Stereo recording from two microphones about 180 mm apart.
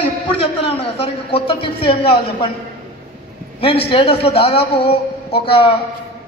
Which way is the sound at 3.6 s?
30° left (ahead or behind).